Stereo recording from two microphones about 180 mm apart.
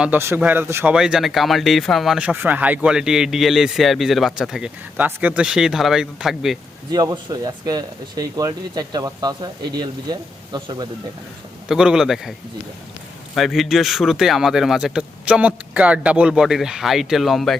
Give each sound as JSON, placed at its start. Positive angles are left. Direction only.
{"t": 0.0, "sound": "speech", "side_deg": -10}
{"t": 0.9, "sound": "speech", "side_deg": -5}
{"t": 6.9, "sound": "speech", "side_deg": -20}
{"t": 11.7, "sound": "speech", "side_deg": -5}
{"t": 13.3, "sound": "speech", "side_deg": 0}